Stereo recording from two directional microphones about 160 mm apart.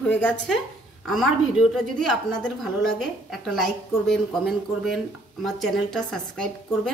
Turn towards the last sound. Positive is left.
turn(degrees=5)  # may be behind; listen again after turning